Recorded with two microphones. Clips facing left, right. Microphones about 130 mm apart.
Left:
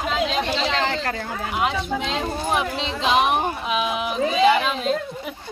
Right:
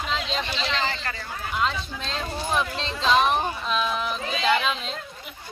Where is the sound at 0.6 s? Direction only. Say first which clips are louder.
Left 5 dB; 75° left (ahead or behind).